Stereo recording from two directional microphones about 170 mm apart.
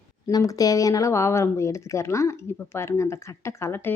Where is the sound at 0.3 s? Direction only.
20° left (ahead or behind).